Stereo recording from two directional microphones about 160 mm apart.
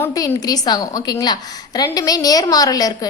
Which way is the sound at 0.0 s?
20° left (ahead or behind).